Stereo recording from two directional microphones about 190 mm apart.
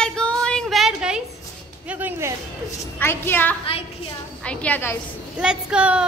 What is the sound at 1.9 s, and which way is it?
Music, 10° right (ahead or behind).